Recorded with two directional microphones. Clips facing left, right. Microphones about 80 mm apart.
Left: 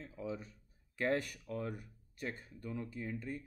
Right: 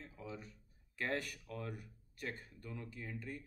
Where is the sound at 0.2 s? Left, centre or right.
Left.